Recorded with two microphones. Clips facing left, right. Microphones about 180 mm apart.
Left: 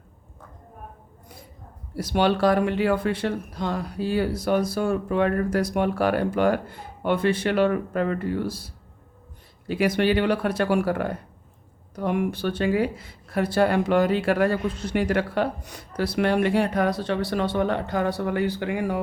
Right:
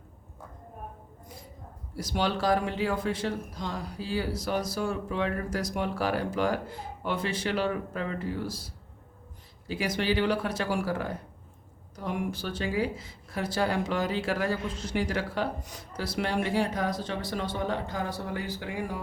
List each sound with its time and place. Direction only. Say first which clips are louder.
2.0 s speech: left 8 dB; 65° left (ahead or behind)